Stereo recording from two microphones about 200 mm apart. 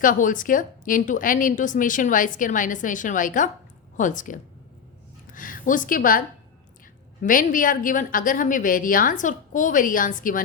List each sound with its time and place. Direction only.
0.0 s a woman's voice: 40° left (ahead or behind)